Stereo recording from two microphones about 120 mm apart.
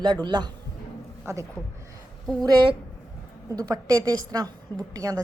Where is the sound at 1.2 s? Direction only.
25° right (ahead or behind).